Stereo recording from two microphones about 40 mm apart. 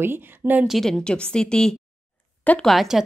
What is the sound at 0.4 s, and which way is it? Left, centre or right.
Speech, right.